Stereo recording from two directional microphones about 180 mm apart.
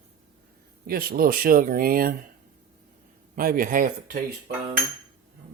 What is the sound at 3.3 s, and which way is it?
Speech, 50° right (ahead or behind).